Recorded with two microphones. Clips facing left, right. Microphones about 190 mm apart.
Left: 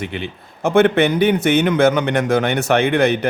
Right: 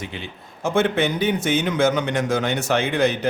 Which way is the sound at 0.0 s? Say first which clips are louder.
Left 7 dB; 65° left (ahead or behind).